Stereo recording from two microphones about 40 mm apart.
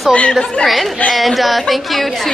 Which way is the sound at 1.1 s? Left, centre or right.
Centre.